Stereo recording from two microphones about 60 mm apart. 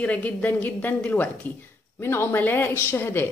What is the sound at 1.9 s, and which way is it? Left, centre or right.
Speech, left.